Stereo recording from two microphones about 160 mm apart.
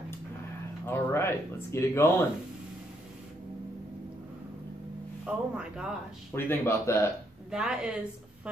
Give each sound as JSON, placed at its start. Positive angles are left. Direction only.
{"t": 0.8, "sound": "speech", "side_deg": 15}
{"t": 5.2, "sound": "speech", "side_deg": -5}
{"t": 6.3, "sound": "speech", "side_deg": 15}
{"t": 7.5, "sound": "speech", "side_deg": -5}